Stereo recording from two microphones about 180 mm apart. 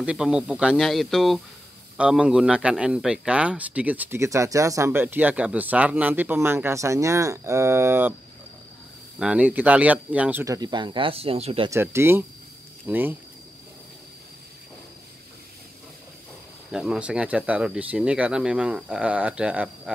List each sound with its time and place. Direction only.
0.0 s a man's voice: 5° right (ahead or behind)
9.2 s a man's voice: 5° right (ahead or behind); by 11.7 s 30° right (ahead or behind)
11.7 s a man's voice: 15° right (ahead or behind)
16.7 s speech: 5° right (ahead or behind)